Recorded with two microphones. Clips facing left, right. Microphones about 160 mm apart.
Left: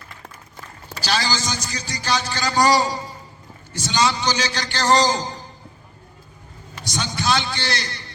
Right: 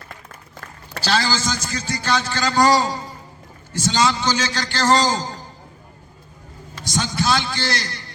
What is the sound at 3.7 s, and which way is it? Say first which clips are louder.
Speech: right 2 dB; 45° right (ahead or behind).